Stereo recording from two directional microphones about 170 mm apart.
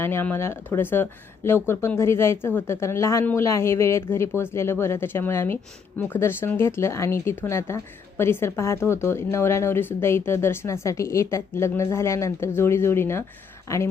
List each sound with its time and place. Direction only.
0.0 s speech: 10° left (ahead or behind)